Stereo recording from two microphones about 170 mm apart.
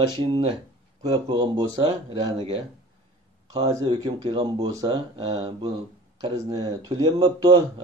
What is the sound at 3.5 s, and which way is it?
Speech, 20° right (ahead or behind).